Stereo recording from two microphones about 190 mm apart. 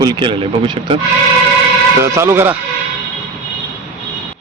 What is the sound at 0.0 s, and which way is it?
Speech, 25° right (ahead or behind).